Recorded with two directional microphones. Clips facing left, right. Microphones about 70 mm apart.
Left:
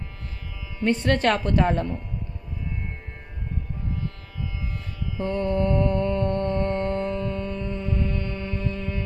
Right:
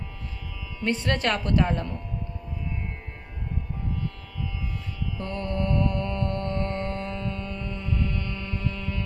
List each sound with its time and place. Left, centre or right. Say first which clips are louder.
0.8 s speech: left 4 dB; left
5.1 s mantra: left 7 dB; left